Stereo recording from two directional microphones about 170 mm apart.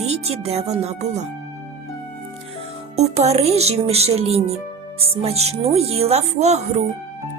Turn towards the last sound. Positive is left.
turn(degrees=-40)  # may be behind; listen again after turning